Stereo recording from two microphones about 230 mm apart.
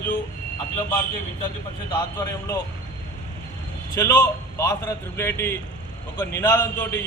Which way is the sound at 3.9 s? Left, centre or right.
Centre.